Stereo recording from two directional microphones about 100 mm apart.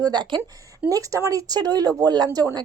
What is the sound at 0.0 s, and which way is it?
Speech, 45° right (ahead or behind).